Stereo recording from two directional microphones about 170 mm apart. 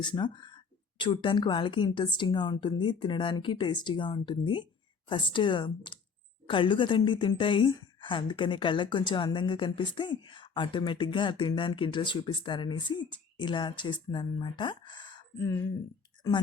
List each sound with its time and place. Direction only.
0.0 s a woman's voice: 25° left (ahead or behind)